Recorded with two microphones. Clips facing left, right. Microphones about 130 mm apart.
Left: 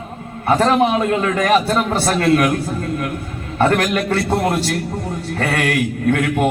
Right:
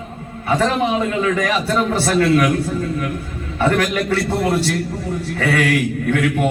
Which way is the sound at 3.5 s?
55° left (ahead or behind).